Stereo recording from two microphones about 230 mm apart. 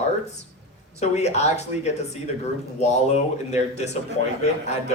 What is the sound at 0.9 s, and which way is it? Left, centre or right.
Speech, left.